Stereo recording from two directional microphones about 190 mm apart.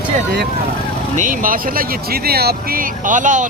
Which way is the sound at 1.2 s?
45° right (ahead or behind).